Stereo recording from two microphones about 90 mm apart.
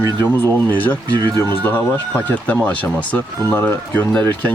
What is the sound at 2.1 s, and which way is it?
Speech, 15° left (ahead or behind).